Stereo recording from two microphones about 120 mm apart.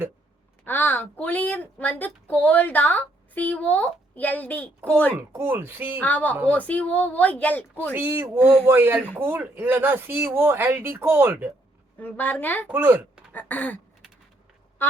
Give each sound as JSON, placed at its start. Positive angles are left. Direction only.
{"t": 0.6, "sound": "a woman's voice", "side_deg": 15}
{"t": 5.4, "sound": "speech", "side_deg": -15}
{"t": 6.0, "sound": "a woman's voice", "side_deg": 15}
{"t": 7.9, "sound": "speech", "side_deg": -15}
{"t": 11.9, "sound": "a woman's voice", "side_deg": 15}
{"t": 12.6, "sound": "speech", "side_deg": -15}
{"t": 13.3, "sound": "a woman's voice", "side_deg": 15}
{"t": 14.8, "sound": "duck", "side_deg": 20}